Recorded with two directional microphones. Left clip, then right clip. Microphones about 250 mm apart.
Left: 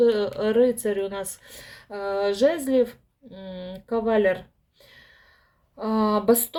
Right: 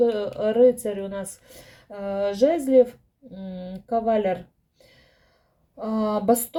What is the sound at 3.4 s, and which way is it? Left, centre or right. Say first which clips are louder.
Speech: even; left.